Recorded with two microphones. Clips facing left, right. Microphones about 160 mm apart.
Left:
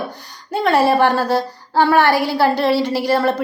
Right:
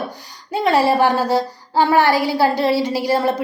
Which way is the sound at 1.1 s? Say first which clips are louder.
Even; 15° right (ahead or behind).